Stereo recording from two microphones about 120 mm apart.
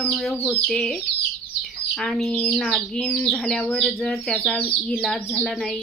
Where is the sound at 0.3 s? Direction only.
15° left (ahead or behind).